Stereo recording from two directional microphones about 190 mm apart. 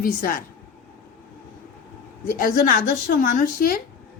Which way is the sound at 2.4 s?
45° left (ahead or behind).